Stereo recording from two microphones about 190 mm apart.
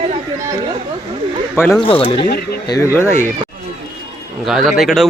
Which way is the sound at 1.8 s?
30° left (ahead or behind).